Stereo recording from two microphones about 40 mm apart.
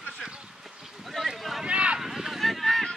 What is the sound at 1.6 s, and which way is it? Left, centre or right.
Boat, right.